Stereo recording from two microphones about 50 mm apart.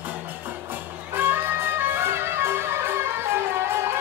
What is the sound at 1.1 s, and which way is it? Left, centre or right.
Music, right.